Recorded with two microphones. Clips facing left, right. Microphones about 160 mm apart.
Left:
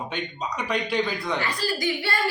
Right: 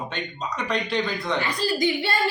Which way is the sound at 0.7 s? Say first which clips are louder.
Even; 5° left (ahead or behind).